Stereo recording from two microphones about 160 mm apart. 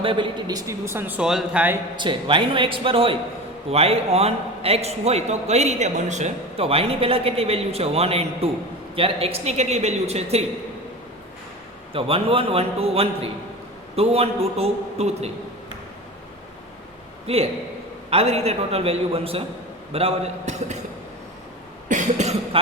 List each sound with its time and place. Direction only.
0.0 s a man's voice: 30° right (ahead or behind); by 1.8 s 10° right (ahead or behind)
2.0 s a man's voice: 30° right (ahead or behind)
11.9 s a man's voice: 35° right (ahead or behind)
17.2 s a man's voice: 40° right (ahead or behind)
21.8 s cough: 50° right (ahead or behind)